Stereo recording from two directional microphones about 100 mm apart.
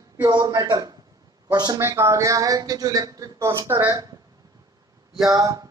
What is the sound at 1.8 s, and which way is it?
Speech, 25° right (ahead or behind).